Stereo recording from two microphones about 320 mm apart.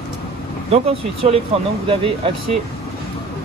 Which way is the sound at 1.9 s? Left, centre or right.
Centre.